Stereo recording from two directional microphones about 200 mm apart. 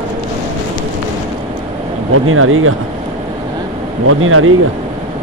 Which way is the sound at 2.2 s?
90° right.